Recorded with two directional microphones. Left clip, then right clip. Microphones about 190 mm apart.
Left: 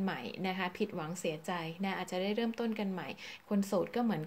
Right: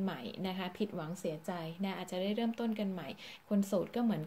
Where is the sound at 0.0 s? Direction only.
15° left (ahead or behind).